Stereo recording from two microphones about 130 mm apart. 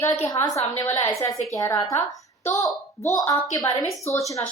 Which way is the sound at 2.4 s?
25° left (ahead or behind).